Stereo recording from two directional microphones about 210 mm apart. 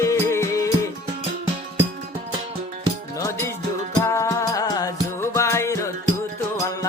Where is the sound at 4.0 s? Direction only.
15° left (ahead or behind).